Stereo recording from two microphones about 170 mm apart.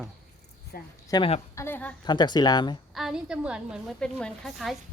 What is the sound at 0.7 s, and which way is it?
Speech, 65° left (ahead or behind).